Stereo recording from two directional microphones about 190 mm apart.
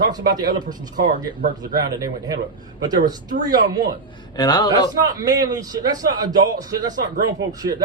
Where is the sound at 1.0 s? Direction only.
45° right (ahead or behind).